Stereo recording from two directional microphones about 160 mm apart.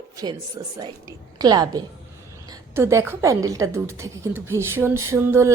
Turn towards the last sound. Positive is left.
turn(degrees=-15)  # may be behind; listen again after turning